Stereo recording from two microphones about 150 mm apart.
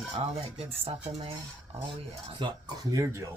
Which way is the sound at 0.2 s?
40° right (ahead or behind).